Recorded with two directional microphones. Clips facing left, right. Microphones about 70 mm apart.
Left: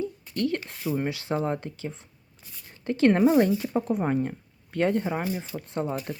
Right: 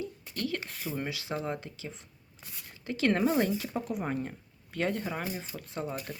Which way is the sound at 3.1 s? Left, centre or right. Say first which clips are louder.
Left 6 dB; left.